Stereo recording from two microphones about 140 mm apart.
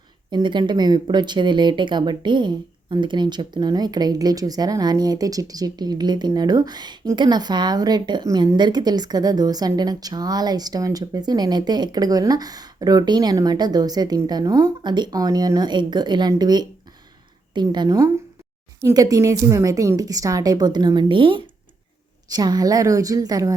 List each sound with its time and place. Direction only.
0.3 s a woman's voice: 35° right (ahead or behind)